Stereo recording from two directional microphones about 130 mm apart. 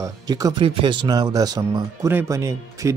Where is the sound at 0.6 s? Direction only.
40° right (ahead or behind).